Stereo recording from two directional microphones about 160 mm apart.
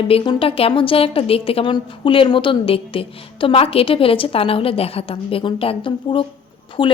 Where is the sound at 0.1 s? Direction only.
35° left (ahead or behind).